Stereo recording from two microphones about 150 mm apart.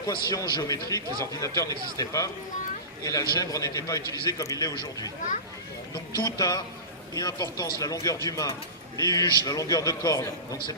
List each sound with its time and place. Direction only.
0.1 s a man's voice: 30° left (ahead or behind)